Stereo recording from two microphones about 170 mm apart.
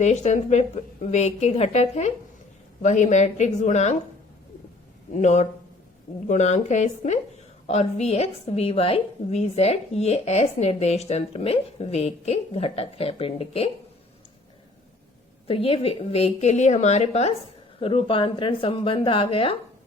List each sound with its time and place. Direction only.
0.0 s a woman's voice: 40° left (ahead or behind)
5.1 s a woman's voice: 45° left (ahead or behind)
15.4 s a woman's voice: 35° left (ahead or behind)
17.7 s a woman's voice: 30° left (ahead or behind)